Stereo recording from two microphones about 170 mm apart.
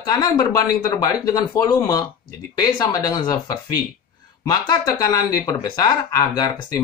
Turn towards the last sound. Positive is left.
turn(degrees=25)  # may be behind; listen again after turning